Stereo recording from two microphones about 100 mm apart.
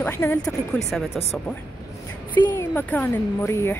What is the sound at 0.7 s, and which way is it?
Speech, centre (ahead or behind).